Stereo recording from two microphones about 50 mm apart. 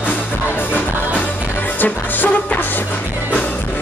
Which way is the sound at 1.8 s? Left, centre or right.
Left.